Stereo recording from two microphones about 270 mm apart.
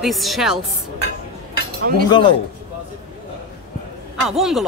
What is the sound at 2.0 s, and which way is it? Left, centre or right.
Speech, centre.